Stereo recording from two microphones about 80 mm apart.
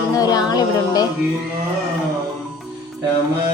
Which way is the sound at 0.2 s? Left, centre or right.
Left.